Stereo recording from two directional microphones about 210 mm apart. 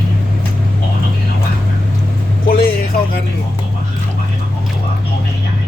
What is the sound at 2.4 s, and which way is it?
Vehicle, 45° left (ahead or behind).